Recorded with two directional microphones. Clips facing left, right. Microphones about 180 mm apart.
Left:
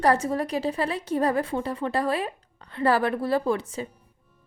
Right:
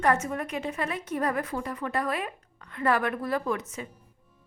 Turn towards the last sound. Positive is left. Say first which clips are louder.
# left 5 dB
turn(degrees=30)  # may be behind; listen again after turning